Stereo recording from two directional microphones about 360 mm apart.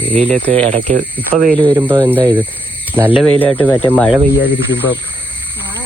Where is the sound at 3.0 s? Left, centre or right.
Centre.